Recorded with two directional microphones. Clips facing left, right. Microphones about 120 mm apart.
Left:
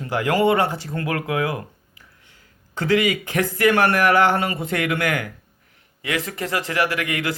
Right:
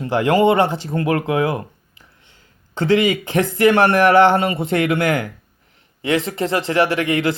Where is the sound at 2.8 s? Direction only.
25° right (ahead or behind).